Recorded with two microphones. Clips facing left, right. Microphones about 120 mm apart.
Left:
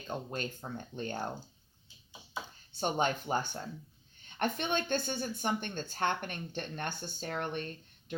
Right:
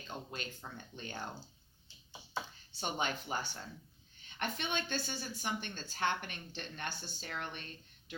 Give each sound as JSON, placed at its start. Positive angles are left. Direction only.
{"t": 0.1, "sound": "speech", "side_deg": 45}
{"t": 2.7, "sound": "speech", "side_deg": 45}